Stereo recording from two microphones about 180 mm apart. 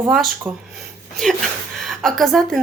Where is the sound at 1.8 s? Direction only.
Centre (ahead or behind).